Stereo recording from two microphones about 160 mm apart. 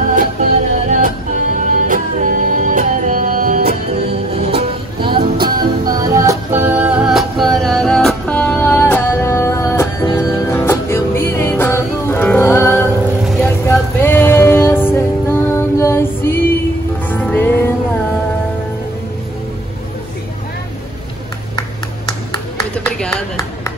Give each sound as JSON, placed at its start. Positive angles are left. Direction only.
{"t": 0.1, "sound": "music", "side_deg": -55}
{"t": 4.4, "sound": "music", "side_deg": -40}
{"t": 5.6, "sound": "music", "side_deg": -25}